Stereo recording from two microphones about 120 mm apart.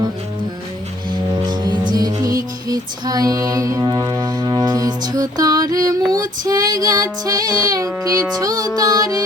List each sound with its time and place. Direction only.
1.5 s music: 40° right (ahead or behind)
6.1 s female singing: 30° right (ahead or behind)